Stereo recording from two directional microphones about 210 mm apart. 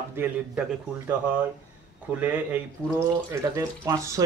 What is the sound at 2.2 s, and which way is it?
Speech, 10° right (ahead or behind).